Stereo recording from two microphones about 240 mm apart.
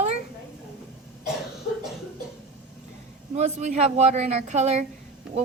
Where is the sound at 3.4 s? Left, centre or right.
Right.